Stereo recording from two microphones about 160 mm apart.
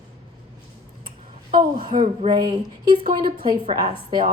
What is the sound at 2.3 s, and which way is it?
Speech, 25° right (ahead or behind).